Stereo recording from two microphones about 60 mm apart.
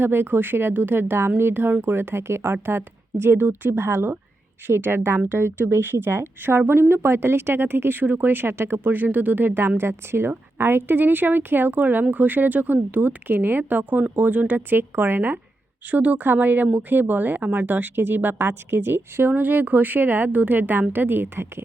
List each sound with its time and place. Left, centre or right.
0.0 s speech: right